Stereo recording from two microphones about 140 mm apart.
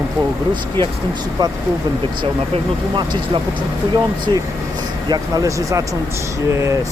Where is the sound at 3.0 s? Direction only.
35° right (ahead or behind).